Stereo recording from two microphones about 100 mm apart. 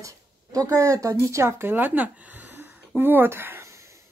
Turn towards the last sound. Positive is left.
turn(degrees=-25)  # may be behind; listen again after turning